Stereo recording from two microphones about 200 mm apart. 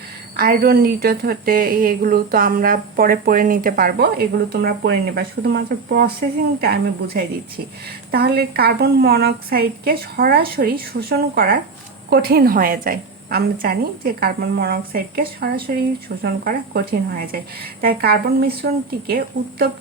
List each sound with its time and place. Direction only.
0.3 s a woman's voice: 50° right (ahead or behind)